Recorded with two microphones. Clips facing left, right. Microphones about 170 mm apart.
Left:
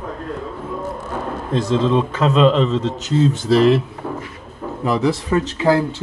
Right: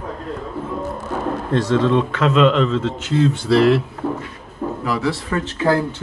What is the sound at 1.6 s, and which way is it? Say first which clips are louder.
Speech: even; 25° left (ahead or behind).